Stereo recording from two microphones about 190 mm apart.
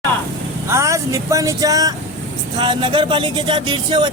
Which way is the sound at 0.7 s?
15° right (ahead or behind).